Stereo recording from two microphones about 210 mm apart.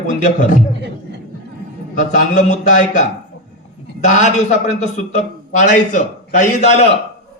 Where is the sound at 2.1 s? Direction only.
35° left (ahead or behind).